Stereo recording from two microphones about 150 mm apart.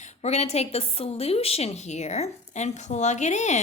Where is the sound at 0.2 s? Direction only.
45° left (ahead or behind).